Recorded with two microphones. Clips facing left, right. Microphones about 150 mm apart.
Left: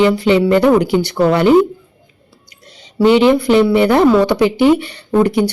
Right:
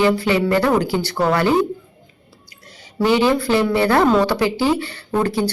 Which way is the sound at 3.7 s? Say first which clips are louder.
Left 5 dB; 20° left (ahead or behind).